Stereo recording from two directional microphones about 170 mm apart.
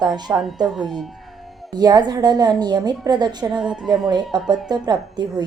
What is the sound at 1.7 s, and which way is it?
Speech, 25° right (ahead or behind).